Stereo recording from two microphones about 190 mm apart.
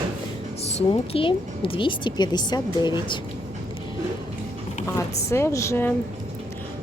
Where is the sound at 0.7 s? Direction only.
30° left (ahead or behind).